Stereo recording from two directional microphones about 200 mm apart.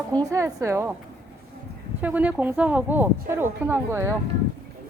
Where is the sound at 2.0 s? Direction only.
10° right (ahead or behind).